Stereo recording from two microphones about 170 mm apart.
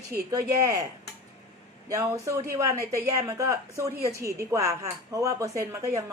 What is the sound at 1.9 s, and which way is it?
Speech, 20° right (ahead or behind).